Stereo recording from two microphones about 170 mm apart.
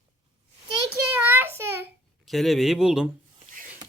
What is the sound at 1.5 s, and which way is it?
Child singing, 15° right (ahead or behind).